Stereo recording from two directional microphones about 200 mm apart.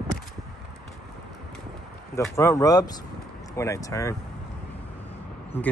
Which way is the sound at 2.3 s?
15° left (ahead or behind).